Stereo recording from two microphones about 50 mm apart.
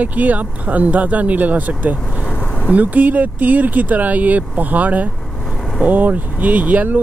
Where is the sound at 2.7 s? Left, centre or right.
Right.